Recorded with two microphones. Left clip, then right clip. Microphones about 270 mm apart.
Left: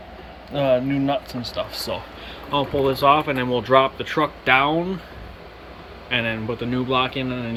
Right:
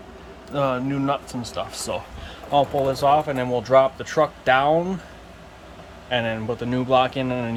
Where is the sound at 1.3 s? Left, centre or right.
Right.